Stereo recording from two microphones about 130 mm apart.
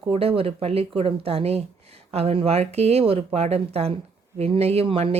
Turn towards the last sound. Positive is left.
turn(degrees=-50)  # may be behind; listen again after turning